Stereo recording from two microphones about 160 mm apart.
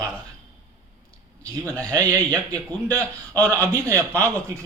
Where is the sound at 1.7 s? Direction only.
20° right (ahead or behind).